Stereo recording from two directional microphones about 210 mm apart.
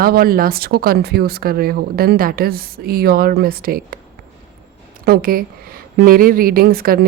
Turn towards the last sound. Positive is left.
turn(degrees=-45)  # may be behind; listen again after turning